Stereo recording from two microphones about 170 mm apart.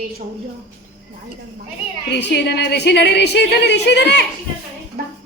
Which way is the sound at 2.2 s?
80° left.